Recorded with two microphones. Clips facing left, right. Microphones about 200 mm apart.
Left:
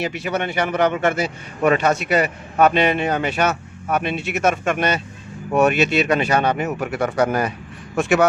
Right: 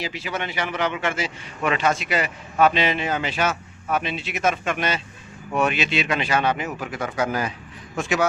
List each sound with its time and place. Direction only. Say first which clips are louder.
0.3 s speech: left 6 dB; 55° left (ahead or behind)
6.7 s speech: left 6 dB; 65° left (ahead or behind)